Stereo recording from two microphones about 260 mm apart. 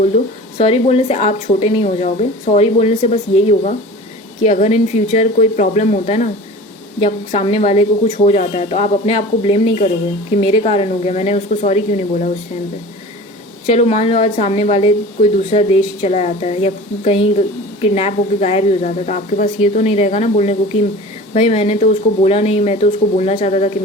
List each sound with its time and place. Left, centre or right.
0.6 s speech: left
13.7 s speech: left